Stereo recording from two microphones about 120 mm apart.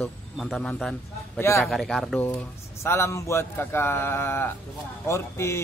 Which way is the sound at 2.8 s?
20° left (ahead or behind).